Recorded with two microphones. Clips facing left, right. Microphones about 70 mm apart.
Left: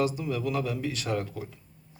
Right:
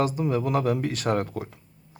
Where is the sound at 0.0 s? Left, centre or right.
Right.